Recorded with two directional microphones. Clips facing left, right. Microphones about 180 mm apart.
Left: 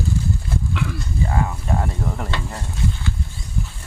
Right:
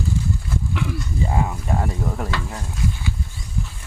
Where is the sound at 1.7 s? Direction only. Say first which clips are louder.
Even; centre (ahead or behind).